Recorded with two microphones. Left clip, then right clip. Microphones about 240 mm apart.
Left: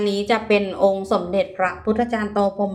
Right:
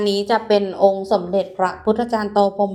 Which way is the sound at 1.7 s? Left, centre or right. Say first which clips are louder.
Right 2 dB; centre.